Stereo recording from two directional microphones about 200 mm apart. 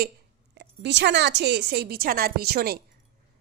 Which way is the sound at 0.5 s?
60° right (ahead or behind).